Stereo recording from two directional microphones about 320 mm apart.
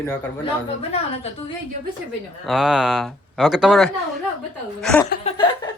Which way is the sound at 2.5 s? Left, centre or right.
Centre.